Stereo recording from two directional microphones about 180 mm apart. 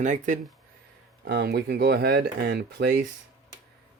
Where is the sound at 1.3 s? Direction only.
70° right (ahead or behind).